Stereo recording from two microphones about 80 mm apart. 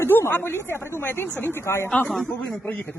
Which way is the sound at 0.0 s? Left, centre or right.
Left.